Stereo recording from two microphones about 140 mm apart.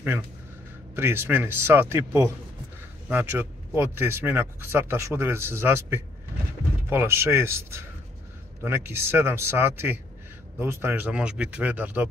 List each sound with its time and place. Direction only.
0.9 s speech: 15° right (ahead or behind)